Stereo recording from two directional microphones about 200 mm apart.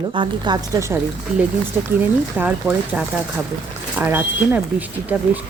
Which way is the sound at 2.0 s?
10° right (ahead or behind).